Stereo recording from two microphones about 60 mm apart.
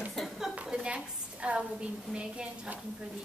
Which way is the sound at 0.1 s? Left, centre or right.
Centre.